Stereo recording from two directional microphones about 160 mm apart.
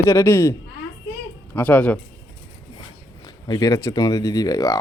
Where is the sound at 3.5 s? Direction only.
20° left (ahead or behind).